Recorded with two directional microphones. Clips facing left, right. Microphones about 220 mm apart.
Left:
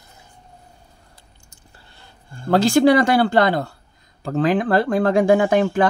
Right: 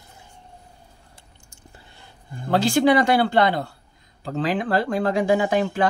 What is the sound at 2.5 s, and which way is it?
Speech, 45° left (ahead or behind).